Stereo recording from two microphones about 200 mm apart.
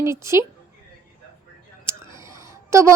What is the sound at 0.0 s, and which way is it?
Speech, 15° right (ahead or behind).